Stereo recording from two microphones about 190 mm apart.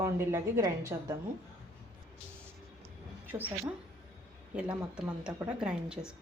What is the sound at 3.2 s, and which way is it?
Speech, 10° right (ahead or behind).